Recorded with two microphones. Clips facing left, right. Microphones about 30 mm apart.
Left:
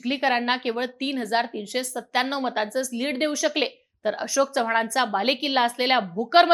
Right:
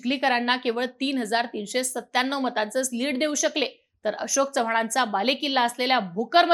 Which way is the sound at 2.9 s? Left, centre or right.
Centre.